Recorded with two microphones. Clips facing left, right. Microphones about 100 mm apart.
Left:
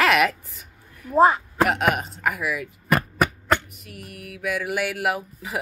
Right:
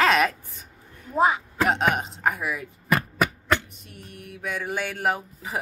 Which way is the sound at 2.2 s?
30° right (ahead or behind).